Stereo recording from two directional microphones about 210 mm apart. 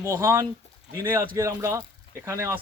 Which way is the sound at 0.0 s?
15° right (ahead or behind).